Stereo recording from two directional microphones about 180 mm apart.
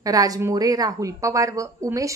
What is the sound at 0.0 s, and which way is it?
A woman's voice, 20° right (ahead or behind).